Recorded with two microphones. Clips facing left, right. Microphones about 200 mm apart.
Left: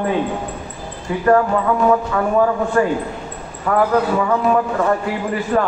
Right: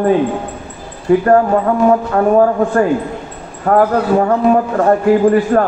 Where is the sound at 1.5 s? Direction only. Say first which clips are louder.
Right 4 dB; 45° right (ahead or behind).